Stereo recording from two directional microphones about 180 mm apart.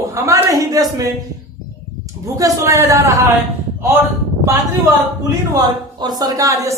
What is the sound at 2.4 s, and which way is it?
Speech, 20° right (ahead or behind).